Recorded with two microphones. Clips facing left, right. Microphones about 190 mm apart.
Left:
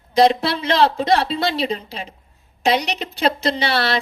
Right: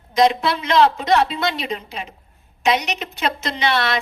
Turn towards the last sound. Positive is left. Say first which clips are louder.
# left 1 dB
turn(degrees=35)  # may be behind; listen again after turning